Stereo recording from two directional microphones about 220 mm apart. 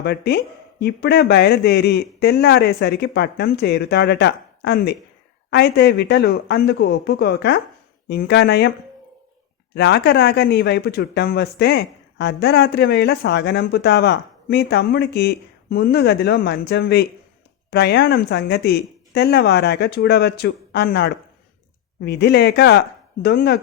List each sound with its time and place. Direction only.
0.0 s speech: 50° left (ahead or behind)
9.7 s speech: 50° left (ahead or behind)